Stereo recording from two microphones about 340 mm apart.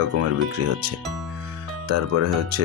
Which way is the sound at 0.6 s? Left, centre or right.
Right.